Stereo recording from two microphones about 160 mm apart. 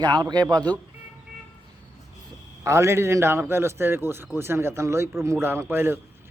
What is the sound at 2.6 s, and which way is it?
A man's voice, 20° right (ahead or behind).